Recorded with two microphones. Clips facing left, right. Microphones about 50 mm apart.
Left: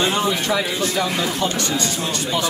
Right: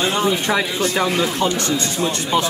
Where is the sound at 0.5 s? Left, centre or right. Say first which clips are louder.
Right 2 dB; right.